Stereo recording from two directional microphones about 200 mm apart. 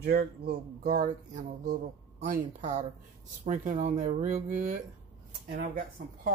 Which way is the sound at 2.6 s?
35° right (ahead or behind).